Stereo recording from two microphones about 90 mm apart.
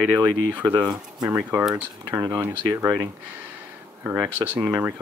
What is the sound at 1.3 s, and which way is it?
Speech, 20° right (ahead or behind).